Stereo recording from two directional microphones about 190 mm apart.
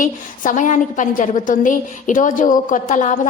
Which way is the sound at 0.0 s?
45° left (ahead or behind).